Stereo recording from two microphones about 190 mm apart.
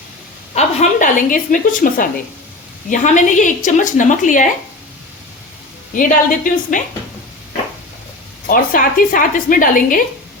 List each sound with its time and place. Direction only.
0.5 s a woman's voice: 40° left (ahead or behind)
5.9 s a woman's voice: 45° left (ahead or behind)
8.4 s a woman's voice: 45° left (ahead or behind)